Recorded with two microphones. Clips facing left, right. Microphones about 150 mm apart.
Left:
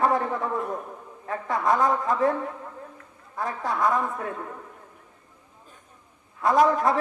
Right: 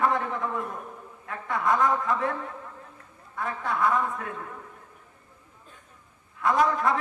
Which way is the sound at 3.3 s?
35° left (ahead or behind).